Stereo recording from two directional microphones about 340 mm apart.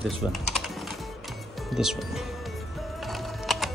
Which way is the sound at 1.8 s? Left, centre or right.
Centre.